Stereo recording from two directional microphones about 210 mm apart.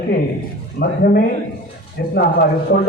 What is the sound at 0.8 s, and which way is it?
A man's voice, 45° left (ahead or behind).